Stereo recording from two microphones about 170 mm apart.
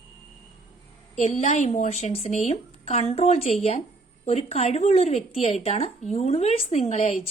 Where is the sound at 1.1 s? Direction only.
45° left (ahead or behind).